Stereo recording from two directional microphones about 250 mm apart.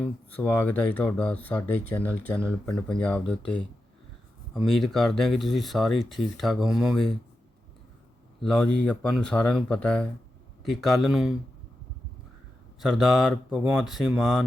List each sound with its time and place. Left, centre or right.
0.0 s speech: centre
8.4 s speech: centre
12.8 s speech: centre